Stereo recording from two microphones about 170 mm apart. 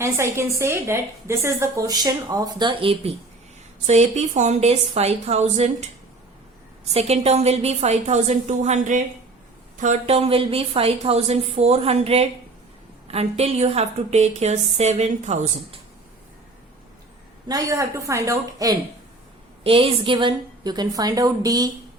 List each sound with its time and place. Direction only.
0.0 s a woman's voice: 15° right (ahead or behind); by 5.7 s 40° right (ahead or behind)
6.8 s a woman's voice: 40° right (ahead or behind)
17.5 s a woman's voice: 20° right (ahead or behind)
19.6 s a woman's voice: 35° right (ahead or behind)